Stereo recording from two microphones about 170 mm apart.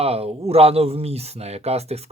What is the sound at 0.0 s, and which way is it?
Speech, 35° right (ahead or behind).